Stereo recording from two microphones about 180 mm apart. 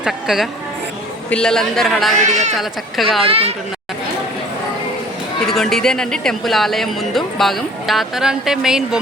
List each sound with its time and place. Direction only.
0.0 s speech: centre (ahead or behind)
2.3 s speech: 40° right (ahead or behind)
2.6 s speech: centre (ahead or behind)
3.2 s speech: 35° right (ahead or behind)
5.5 s speech: centre (ahead or behind)